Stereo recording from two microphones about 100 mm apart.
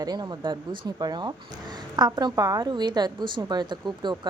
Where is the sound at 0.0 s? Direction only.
45° right (ahead or behind).